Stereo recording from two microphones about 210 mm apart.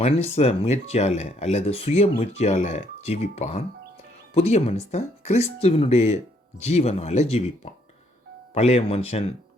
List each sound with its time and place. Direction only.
0.0 s speech: 30° left (ahead or behind)